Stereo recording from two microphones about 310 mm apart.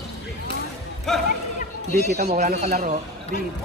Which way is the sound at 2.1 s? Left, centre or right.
Right.